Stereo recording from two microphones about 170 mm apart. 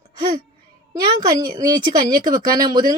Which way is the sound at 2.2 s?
55° right (ahead or behind).